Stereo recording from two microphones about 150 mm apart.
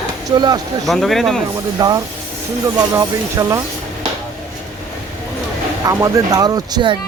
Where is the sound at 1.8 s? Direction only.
25° right (ahead or behind).